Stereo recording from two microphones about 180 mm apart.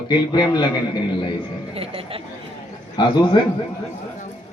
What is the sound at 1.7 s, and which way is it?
Speech, 35° right (ahead or behind).